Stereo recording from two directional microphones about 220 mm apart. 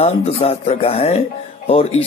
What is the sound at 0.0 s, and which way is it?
Speech, 25° left (ahead or behind).